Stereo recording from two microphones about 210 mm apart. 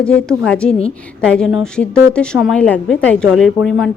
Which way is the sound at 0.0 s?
5° left (ahead or behind).